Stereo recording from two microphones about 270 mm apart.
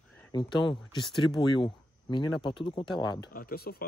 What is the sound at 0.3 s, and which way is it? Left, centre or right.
Speech, centre.